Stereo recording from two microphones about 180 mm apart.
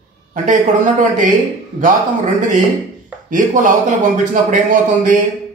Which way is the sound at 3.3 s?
45° right (ahead or behind).